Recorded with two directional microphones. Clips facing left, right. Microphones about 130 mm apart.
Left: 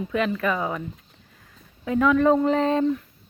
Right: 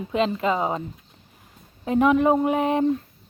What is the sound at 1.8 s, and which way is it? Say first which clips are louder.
Speech: right 1 dB; 25° right (ahead or behind).